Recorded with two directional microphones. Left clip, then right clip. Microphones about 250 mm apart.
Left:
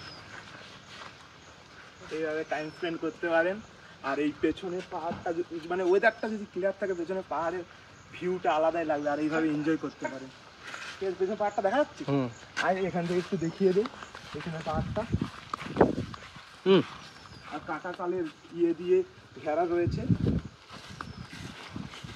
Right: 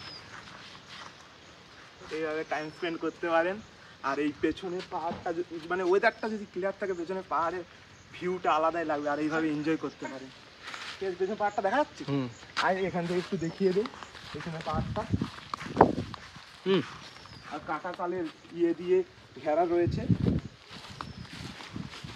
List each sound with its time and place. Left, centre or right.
2.0 s speech: centre
11.4 s speech: centre
13.7 s a sound: centre
16.6 s speech: centre
17.6 s speech: right